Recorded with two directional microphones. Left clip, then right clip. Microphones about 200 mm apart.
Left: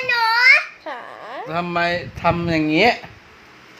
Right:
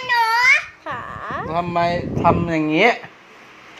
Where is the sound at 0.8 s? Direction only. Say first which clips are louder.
Right 3 dB; 15° right (ahead or behind).